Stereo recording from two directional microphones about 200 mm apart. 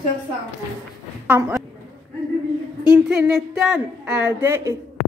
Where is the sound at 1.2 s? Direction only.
10° right (ahead or behind).